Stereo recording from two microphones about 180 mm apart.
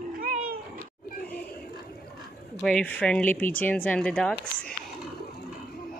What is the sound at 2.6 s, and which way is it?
Speech, 5° left (ahead or behind).